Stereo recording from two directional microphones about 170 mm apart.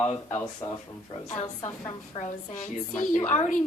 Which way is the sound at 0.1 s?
35° left (ahead or behind).